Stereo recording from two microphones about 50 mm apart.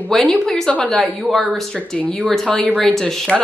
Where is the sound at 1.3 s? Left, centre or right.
Centre.